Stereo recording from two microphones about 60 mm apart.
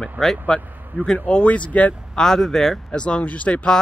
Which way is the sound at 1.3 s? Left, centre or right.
Left.